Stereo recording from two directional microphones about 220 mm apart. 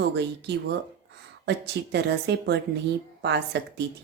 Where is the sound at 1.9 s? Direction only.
50° right (ahead or behind).